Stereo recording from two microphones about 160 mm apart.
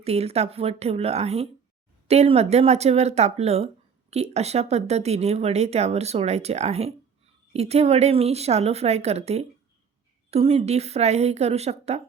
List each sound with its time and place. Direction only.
0.0 s speech: 40° right (ahead or behind)